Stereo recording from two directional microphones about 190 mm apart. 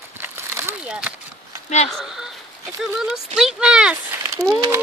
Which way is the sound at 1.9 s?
Centre (ahead or behind).